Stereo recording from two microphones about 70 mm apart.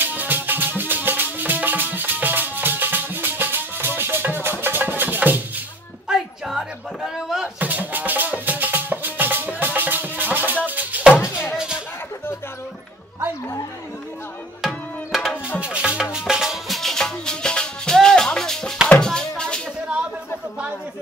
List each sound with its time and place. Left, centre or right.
0.0 s music: right
6.0 s a sound: centre
7.5 s music: right
11.5 s music: centre
14.6 s tabla: centre
15.6 s music: centre